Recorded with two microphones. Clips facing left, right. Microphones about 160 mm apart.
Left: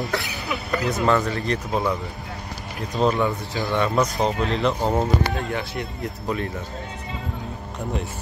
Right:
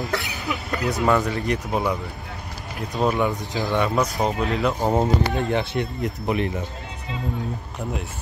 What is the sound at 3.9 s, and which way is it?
Speech, centre (ahead or behind).